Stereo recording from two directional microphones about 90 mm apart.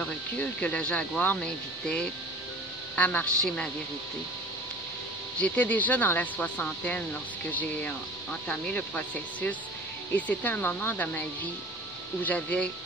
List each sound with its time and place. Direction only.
0.0 s speech: 15° left (ahead or behind)
5.4 s speech: 15° left (ahead or behind)